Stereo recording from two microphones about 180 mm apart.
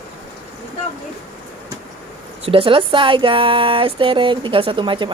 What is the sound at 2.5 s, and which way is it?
Speech, 30° right (ahead or behind).